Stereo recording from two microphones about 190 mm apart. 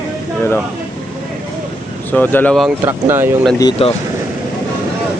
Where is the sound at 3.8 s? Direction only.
30° left (ahead or behind).